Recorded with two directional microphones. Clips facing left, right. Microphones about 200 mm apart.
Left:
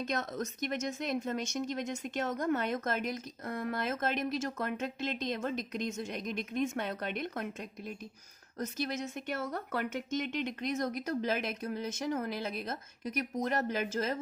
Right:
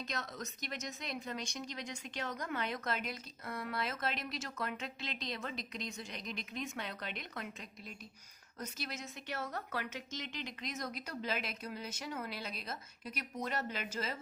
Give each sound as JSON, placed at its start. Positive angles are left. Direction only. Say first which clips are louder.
{"t": 0.1, "sound": "a woman's voice", "louder": "left 8 dB", "side_deg": 50}
{"t": 8.5, "sound": "a woman's voice", "louder": "left 9 dB", "side_deg": 50}